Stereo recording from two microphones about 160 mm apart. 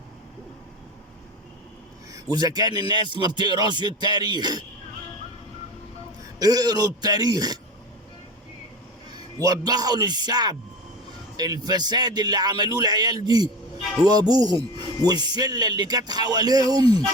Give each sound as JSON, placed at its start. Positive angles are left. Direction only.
{"t": 2.3, "sound": "speech", "side_deg": -25}
{"t": 6.4, "sound": "speech", "side_deg": -25}
{"t": 9.4, "sound": "speech", "side_deg": -25}